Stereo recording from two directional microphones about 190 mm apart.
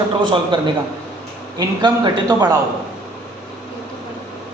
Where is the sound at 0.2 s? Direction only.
25° right (ahead or behind).